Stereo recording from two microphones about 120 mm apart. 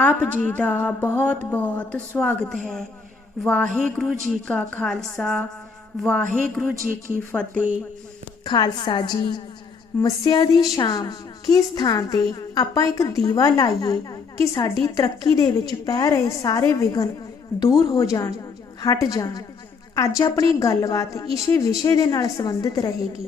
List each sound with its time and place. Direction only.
0.0 s a woman's voice: 10° left (ahead or behind)
3.4 s a sound: 10° left (ahead or behind)
4.4 s a woman's voice: 10° left (ahead or behind)
6.5 s a sound: 5° left (ahead or behind)
7.5 s speech: 15° right (ahead or behind)
8.4 s a woman's voice: 40° left (ahead or behind)